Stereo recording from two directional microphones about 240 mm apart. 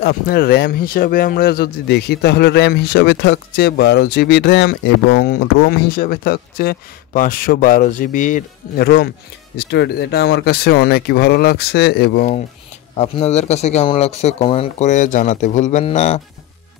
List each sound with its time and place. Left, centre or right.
0.0 s speech: left